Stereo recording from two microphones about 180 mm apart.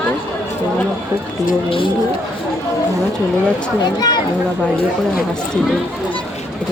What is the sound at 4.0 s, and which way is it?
Speech, 20° left (ahead or behind).